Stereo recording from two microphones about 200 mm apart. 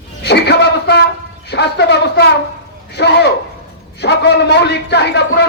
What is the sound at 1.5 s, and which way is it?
A man's voice, 55° left (ahead or behind).